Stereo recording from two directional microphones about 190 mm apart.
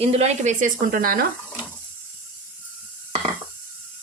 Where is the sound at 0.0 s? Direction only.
35° right (ahead or behind).